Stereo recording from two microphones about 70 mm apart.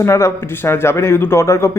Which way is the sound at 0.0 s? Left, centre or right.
Left.